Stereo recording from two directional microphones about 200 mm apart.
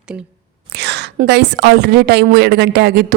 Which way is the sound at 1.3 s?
55° right (ahead or behind).